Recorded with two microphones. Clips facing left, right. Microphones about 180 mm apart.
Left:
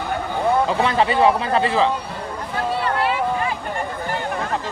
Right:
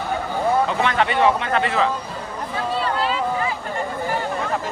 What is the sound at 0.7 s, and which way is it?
Speech, 30° left (ahead or behind).